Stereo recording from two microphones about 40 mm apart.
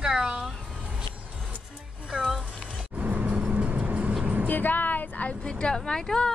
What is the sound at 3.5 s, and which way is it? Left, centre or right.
Vehicle, right.